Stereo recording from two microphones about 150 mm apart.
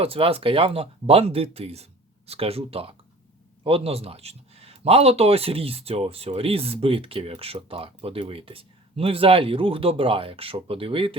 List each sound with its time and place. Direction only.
0.0 s speech: 40° right (ahead or behind)